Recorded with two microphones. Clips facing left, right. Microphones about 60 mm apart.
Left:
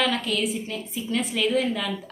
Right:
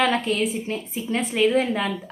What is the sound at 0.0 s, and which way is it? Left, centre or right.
A woman's voice, right.